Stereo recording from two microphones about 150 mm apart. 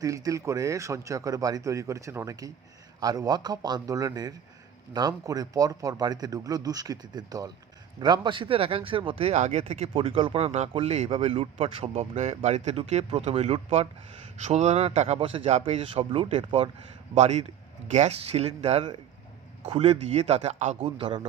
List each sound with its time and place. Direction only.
0.0 s a man's voice: 25° right (ahead or behind)
17.2 s a man's voice: 50° right (ahead or behind)
21.0 s speech: 35° right (ahead or behind)